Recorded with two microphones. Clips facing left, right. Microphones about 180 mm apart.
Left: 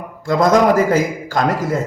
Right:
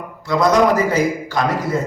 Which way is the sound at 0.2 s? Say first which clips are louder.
Left 1 dB; 50° left (ahead or behind).